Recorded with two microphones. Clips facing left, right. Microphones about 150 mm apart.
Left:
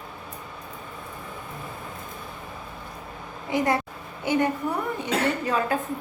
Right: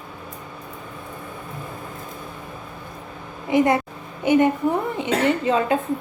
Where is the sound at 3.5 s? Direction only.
20° right (ahead or behind).